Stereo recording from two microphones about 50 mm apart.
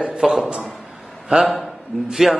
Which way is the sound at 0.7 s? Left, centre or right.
Centre.